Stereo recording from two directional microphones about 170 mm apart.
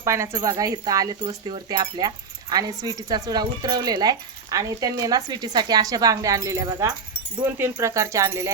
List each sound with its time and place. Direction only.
0.0 s speech: 15° right (ahead or behind)